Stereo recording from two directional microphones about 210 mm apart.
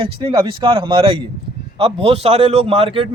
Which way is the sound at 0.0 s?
25° right (ahead or behind).